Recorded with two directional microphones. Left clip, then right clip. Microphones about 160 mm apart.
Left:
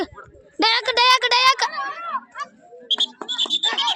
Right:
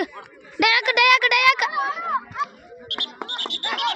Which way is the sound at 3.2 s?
30° left (ahead or behind).